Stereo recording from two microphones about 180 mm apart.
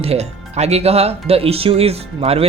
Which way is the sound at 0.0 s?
35° right (ahead or behind).